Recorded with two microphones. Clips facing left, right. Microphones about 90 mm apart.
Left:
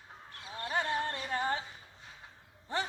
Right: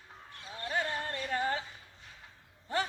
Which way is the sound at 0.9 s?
15° left (ahead or behind).